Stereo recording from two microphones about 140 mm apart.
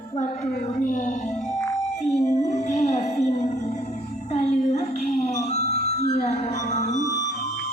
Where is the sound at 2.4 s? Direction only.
55° left (ahead or behind).